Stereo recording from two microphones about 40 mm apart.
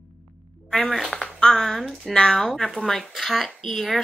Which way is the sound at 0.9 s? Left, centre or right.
Centre.